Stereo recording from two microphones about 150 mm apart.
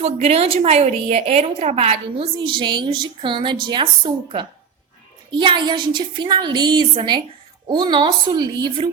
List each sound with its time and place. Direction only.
0.0 s a woman's voice: 45° right (ahead or behind)